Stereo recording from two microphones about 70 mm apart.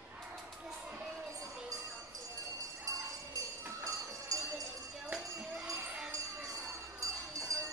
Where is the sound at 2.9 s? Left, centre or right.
Right.